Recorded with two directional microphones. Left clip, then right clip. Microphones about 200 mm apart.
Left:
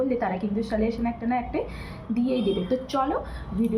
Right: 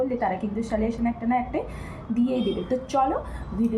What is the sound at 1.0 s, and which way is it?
Speech, 5° left (ahead or behind).